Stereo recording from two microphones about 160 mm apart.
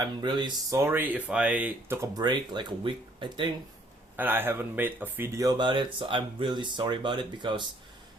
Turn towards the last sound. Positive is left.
turn(degrees=-30)  # may be behind; listen again after turning